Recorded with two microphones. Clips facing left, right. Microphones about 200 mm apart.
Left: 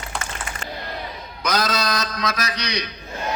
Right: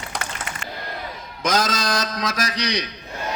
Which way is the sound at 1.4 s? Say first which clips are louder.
Right 1 dB; 45° right (ahead or behind).